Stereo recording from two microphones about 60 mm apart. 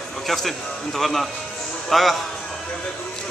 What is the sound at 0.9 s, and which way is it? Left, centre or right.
Speech, centre.